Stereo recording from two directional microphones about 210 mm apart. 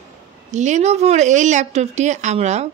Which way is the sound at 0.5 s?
35° right (ahead or behind).